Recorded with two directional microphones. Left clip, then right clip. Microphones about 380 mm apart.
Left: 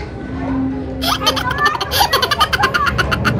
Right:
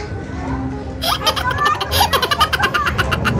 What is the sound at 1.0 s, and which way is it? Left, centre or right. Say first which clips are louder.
Giggle: left 1 dB; centre.